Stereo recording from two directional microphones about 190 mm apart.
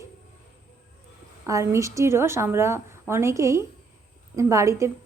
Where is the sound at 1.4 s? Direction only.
15° right (ahead or behind).